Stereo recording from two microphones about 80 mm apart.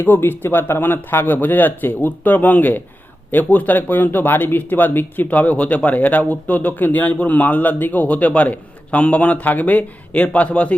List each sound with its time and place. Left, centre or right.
0.0 s speech: left